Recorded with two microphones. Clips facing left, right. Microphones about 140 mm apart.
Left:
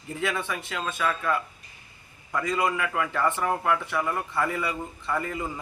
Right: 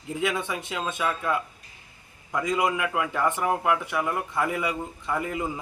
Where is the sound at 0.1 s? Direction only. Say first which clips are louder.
Right 2 dB; 15° right (ahead or behind).